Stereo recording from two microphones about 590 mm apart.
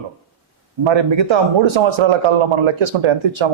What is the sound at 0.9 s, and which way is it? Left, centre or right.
A man's voice, right.